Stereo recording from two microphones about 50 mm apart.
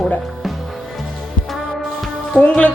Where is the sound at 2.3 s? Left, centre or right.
Left.